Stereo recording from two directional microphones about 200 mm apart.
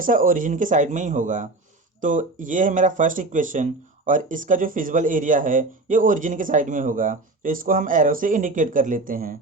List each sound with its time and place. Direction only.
0.0 s speech: 45° right (ahead or behind)